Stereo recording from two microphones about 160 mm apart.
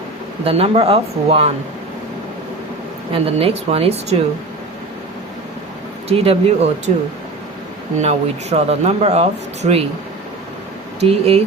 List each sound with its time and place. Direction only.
0.4 s speech: 35° right (ahead or behind)
3.1 s speech: 35° right (ahead or behind)
6.1 s speech: 40° right (ahead or behind)
7.9 s speech: 45° right (ahead or behind)
11.0 s speech: 40° right (ahead or behind)